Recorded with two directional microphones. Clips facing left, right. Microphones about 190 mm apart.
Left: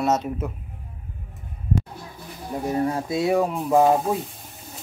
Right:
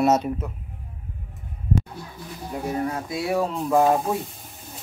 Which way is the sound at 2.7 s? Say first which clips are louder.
Left 5 dB; 30° left (ahead or behind).